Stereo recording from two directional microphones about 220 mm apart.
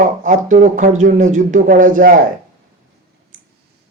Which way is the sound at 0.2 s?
35° right (ahead or behind).